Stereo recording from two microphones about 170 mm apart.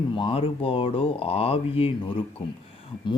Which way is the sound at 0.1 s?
30° left (ahead or behind).